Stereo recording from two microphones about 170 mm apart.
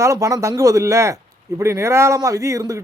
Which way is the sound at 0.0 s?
20° right (ahead or behind).